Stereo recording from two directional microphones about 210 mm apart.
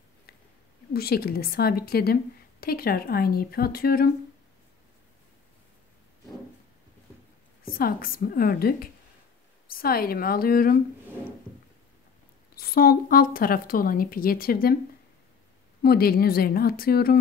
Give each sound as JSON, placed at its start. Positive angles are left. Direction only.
{"t": 0.9, "sound": "a woman's voice", "side_deg": 45}
{"t": 7.6, "sound": "a woman's voice", "side_deg": 45}
{"t": 12.5, "sound": "a woman's voice", "side_deg": 45}
{"t": 15.8, "sound": "a woman's voice", "side_deg": 45}